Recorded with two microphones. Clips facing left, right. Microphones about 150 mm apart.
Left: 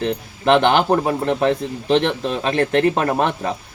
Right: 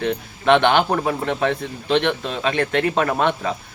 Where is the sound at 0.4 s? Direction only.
35° left (ahead or behind).